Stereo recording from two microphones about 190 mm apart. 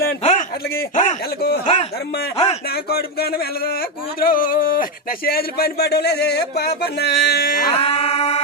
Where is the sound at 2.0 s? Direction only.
55° left (ahead or behind).